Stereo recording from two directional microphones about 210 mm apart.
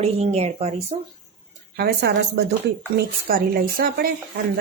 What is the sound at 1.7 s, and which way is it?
Speech, 50° right (ahead or behind).